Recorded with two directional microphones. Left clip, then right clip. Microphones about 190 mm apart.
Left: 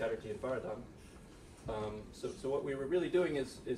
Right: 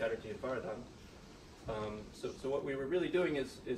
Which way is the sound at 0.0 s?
10° left (ahead or behind).